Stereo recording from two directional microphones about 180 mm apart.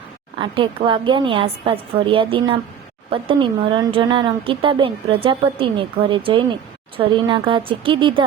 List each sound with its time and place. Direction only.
0.3 s speech: 30° right (ahead or behind)